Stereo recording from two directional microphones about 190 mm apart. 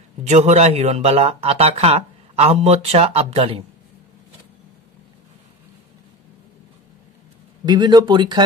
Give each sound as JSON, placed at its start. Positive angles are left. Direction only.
{"t": 0.3, "sound": "speech", "side_deg": -40}
{"t": 7.6, "sound": "speech", "side_deg": -20}